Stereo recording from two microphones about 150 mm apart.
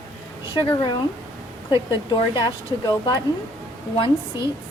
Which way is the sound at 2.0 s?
30° left (ahead or behind).